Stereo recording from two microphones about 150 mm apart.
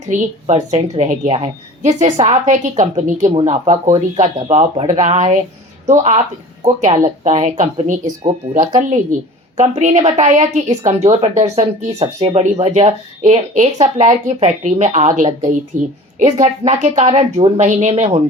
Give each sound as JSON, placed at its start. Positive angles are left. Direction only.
{"t": 0.1, "sound": "a woman's voice", "side_deg": -50}
{"t": 9.6, "sound": "a woman's voice", "side_deg": -50}